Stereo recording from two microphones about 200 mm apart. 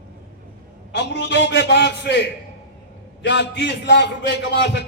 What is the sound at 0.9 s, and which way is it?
A man's voice, 60° left (ahead or behind).